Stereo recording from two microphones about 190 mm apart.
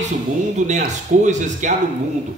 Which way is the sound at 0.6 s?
40° right (ahead or behind).